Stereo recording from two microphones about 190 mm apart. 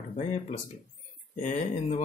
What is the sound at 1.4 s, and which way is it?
Speech, 40° left (ahead or behind).